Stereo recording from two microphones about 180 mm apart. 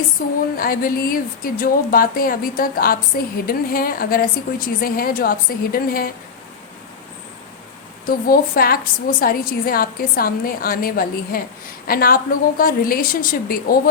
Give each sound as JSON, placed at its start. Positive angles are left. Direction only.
{"t": 0.5, "sound": "a woman's voice", "side_deg": 55}
{"t": 8.0, "sound": "a woman's voice", "side_deg": 55}